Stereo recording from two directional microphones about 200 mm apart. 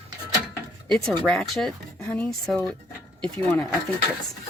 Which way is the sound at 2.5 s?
5° left (ahead or behind).